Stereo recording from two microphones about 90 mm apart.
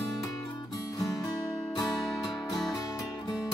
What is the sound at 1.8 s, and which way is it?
Music, 50° left (ahead or behind).